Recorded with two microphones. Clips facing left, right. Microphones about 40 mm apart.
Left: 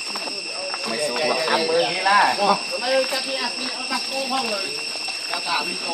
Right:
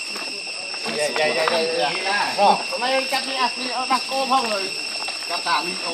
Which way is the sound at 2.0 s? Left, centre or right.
Left.